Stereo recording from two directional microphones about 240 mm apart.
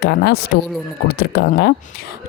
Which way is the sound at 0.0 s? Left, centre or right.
Left.